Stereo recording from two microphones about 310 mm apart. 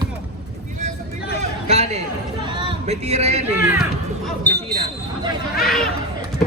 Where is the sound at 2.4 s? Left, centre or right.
Centre.